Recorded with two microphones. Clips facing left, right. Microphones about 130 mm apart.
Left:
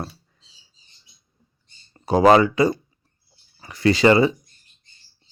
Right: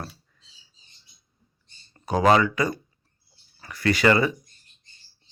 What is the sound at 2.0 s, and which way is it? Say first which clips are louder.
Speech: left 5 dB; 30° left (ahead or behind).